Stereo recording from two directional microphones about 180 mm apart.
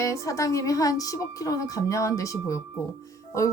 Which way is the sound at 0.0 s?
15° left (ahead or behind).